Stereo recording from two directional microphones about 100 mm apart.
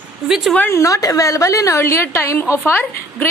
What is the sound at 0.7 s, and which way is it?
A woman's voice, 35° left (ahead or behind).